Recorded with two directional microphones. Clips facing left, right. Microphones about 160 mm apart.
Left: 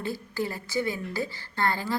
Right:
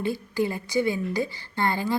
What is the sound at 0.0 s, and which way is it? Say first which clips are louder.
Speech: right 5 dB; 15° right (ahead or behind).